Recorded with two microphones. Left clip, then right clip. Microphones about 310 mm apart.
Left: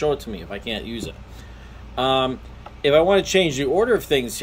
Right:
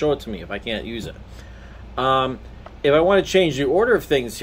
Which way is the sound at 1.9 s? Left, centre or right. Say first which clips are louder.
Right 1 dB; centre.